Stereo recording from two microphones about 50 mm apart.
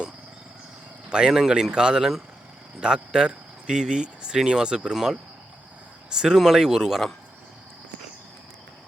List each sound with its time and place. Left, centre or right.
1.1 s speech: centre
6.1 s speech: centre